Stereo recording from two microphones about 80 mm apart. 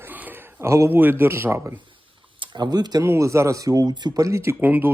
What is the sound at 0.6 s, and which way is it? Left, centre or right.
Speech, right.